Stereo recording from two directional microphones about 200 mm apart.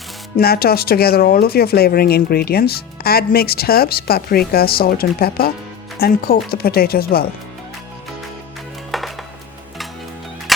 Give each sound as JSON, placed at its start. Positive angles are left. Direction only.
{"t": 0.3, "sound": "speech", "side_deg": 50}
{"t": 8.9, "sound": "music", "side_deg": 0}